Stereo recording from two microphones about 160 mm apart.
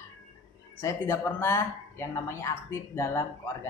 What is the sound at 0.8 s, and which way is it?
Speech, 20° left (ahead or behind).